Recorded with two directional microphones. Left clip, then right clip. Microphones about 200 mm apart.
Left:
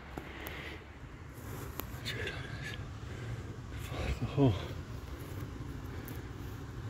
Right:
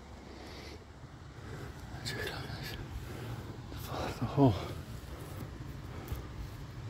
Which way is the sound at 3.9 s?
10° right (ahead or behind).